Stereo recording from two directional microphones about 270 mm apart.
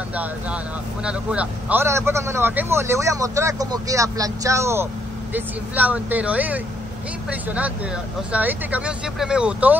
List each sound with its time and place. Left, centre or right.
0.1 s a man's voice: centre